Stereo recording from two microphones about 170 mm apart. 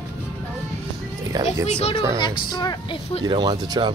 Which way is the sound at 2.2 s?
25° left (ahead or behind).